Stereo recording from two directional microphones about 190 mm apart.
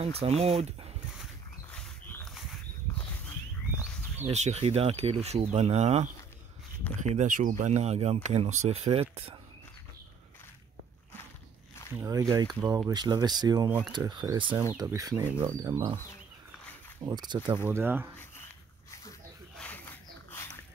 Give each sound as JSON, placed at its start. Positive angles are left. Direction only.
{"t": 0.2, "sound": "speech", "side_deg": -30}
{"t": 1.7, "sound": "dog", "side_deg": 10}
{"t": 4.3, "sound": "speech", "side_deg": -35}
{"t": 6.8, "sound": "speech", "side_deg": 10}
{"t": 7.2, "sound": "speech", "side_deg": -45}
{"t": 11.9, "sound": "speech", "side_deg": -15}
{"t": 17.0, "sound": "speech", "side_deg": -20}
{"t": 17.6, "sound": "speech", "side_deg": -10}
{"t": 18.4, "sound": "dog", "side_deg": 15}